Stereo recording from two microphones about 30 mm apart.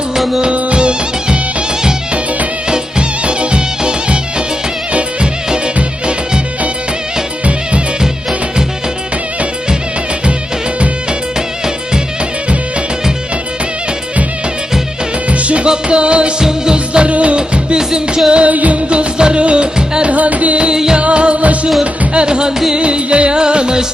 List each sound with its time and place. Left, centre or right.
0.5 s music: right
3.2 s music: right
15.3 s music: right
16.4 s music: right
16.7 s music: right
17.7 s music: right
18.4 s music: right
18.9 s music: right
20.1 s music: right
20.7 s music: centre
21.0 s music: right
22.1 s music: right